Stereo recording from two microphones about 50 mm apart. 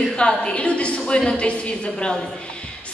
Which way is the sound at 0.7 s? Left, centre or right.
Left.